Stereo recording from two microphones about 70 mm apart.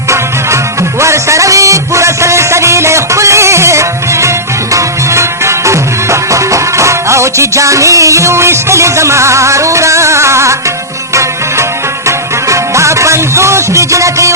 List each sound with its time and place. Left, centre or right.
0.1 s music: right